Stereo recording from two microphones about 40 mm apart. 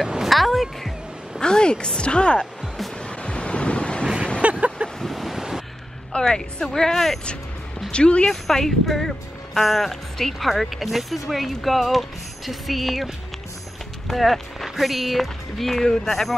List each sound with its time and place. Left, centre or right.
0.3 s music: centre
1.4 s speech: left
3.0 s vehicle: left
4.4 s vehicle: right
5.0 s waves: centre
6.1 s speech: centre
7.9 s speech: left
8.3 s speech: centre